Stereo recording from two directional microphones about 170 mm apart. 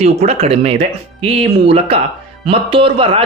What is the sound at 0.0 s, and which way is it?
Speech, 40° right (ahead or behind).